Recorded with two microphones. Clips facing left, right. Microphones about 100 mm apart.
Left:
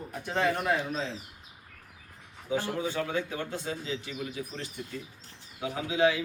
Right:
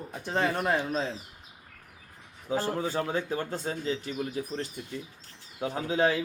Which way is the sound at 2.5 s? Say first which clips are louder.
Right 2 dB; 40° right (ahead or behind).